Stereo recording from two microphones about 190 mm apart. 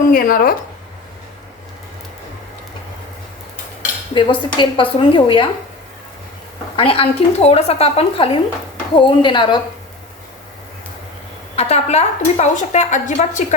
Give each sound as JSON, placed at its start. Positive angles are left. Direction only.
{"t": 0.1, "sound": "speech", "side_deg": 50}
{"t": 4.1, "sound": "a woman's voice", "side_deg": 25}
{"t": 6.7, "sound": "a woman's voice", "side_deg": 30}
{"t": 11.5, "sound": "a woman's voice", "side_deg": 35}